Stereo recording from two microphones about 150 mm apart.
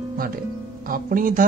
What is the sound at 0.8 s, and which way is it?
Speech, 70° right (ahead or behind).